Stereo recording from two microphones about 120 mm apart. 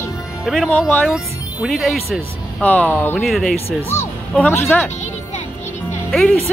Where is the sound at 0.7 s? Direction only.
15° left (ahead or behind).